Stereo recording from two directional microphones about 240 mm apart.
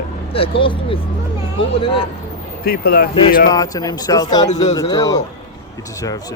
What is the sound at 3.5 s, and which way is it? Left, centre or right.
Speech, centre.